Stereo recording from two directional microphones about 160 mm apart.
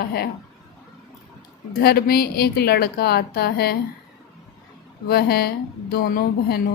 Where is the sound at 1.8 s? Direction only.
75° left (ahead or behind).